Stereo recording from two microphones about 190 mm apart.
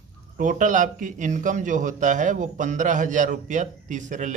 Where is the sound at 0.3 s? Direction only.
40° right (ahead or behind).